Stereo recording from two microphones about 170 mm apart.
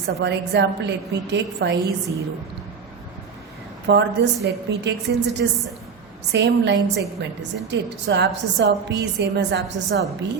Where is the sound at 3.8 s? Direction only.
90° right.